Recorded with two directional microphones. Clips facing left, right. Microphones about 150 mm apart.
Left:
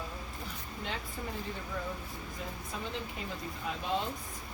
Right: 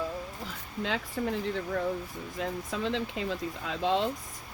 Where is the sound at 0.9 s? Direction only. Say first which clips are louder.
Right 9 dB; 80° right.